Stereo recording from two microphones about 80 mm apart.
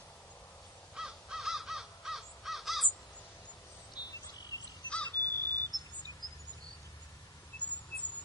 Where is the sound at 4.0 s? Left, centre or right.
Left.